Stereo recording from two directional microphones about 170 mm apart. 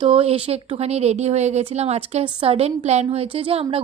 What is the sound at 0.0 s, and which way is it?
A woman's voice, 35° right (ahead or behind).